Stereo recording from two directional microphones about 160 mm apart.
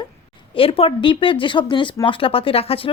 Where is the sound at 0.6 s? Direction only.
35° left (ahead or behind).